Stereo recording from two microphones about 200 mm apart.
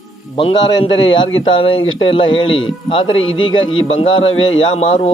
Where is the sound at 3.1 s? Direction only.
85° left.